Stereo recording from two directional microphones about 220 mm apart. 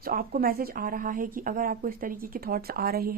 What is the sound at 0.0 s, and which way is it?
Speech, 40° right (ahead or behind).